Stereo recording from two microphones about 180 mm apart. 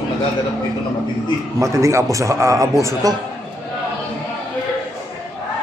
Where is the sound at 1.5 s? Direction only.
20° right (ahead or behind).